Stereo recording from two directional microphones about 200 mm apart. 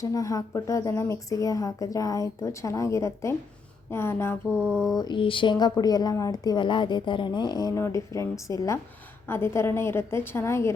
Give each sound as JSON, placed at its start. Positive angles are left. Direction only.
{"t": 0.0, "sound": "a woman's voice", "side_deg": 15}
{"t": 4.4, "sound": "a sound", "side_deg": -5}
{"t": 4.9, "sound": "a woman's voice", "side_deg": 25}